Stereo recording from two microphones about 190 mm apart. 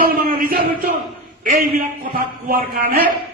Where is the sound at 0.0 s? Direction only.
50° right (ahead or behind).